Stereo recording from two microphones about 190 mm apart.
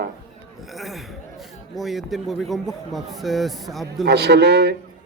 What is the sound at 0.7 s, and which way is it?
Speech, centre (ahead or behind).